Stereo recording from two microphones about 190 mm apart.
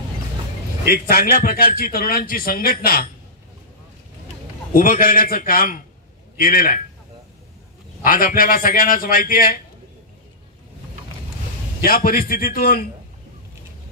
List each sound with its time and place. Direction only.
0.8 s a man's voice: 50° left (ahead or behind)
4.7 s a man's voice: 50° left (ahead or behind)
8.0 s a man's voice: 45° left (ahead or behind)
11.8 s a man's voice: 50° left (ahead or behind)